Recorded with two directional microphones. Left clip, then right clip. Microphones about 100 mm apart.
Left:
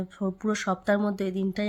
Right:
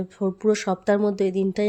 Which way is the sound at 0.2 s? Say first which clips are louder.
Right 8 dB; 25° right (ahead or behind).